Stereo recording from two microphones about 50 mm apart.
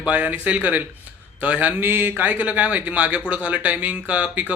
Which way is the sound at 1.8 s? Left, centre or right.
Right.